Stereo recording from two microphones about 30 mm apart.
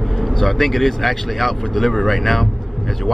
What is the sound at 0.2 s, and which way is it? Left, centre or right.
Speech, centre.